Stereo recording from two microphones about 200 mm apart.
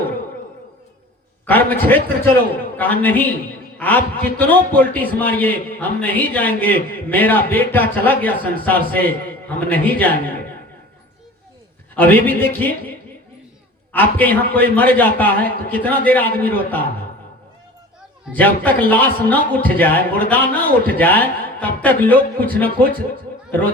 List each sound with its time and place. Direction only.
1.5 s a man's voice: 10° left (ahead or behind)
11.9 s a man's voice: 10° left (ahead or behind)
13.9 s a man's voice: 10° left (ahead or behind)
18.3 s a man's voice: 10° left (ahead or behind)